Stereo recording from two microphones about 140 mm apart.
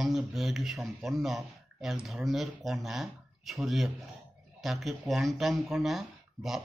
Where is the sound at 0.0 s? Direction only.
Centre (ahead or behind).